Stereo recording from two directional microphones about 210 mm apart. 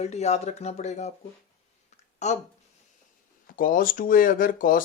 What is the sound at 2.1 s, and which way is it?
Speech, 35° left (ahead or behind).